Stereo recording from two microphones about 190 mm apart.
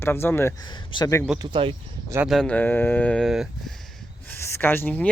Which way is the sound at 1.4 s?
25° right (ahead or behind).